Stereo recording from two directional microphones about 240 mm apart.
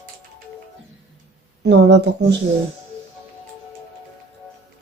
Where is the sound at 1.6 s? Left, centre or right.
Right.